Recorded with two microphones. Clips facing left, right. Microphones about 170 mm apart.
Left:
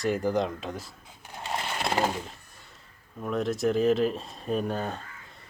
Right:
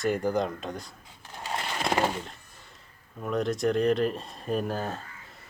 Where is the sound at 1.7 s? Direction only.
5° left (ahead or behind).